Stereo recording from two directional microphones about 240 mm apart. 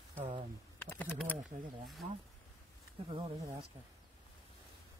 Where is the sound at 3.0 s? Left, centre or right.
Right.